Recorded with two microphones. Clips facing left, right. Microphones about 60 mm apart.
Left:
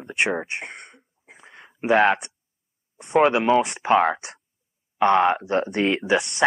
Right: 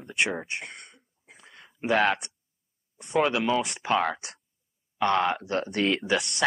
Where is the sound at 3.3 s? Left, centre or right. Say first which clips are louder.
Left 7 dB; left.